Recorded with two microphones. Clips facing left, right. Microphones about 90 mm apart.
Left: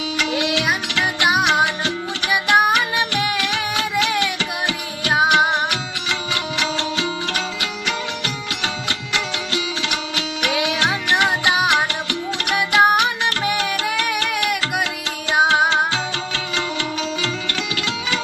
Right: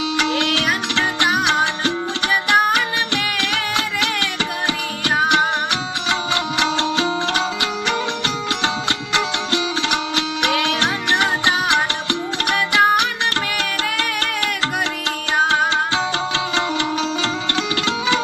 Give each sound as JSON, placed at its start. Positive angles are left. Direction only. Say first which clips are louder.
{"t": 3.2, "sound": "music", "louder": "left 1 dB", "side_deg": 20}
{"t": 6.1, "sound": "music", "louder": "right 3 dB", "side_deg": -30}
{"t": 12.5, "sound": "music", "louder": "left 1 dB", "side_deg": 15}
{"t": 15.4, "sound": "music", "louder": "left 2 dB", "side_deg": 15}
{"t": 16.3, "sound": "music", "louder": "right 4 dB", "side_deg": -30}